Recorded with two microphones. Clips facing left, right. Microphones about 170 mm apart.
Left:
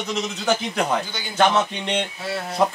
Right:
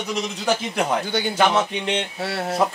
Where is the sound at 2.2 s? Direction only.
70° right (ahead or behind).